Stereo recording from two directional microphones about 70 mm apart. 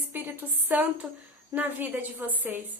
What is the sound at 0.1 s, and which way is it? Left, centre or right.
A woman's voice, right.